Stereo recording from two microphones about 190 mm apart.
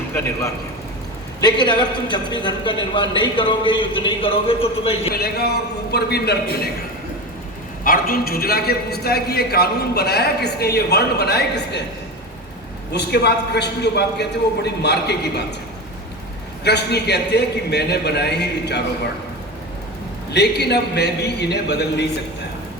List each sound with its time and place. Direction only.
1.4 s a man's voice: 25° left (ahead or behind)
5.1 s a man's voice: 55° left (ahead or behind)
7.9 s a man's voice: 50° left (ahead or behind)
12.9 s a man's voice: 60° left (ahead or behind)
16.6 s a man's voice: 60° left (ahead or behind)
20.3 s a man's voice: 60° left (ahead or behind)